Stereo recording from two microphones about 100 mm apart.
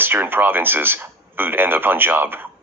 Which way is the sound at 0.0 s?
20° right (ahead or behind).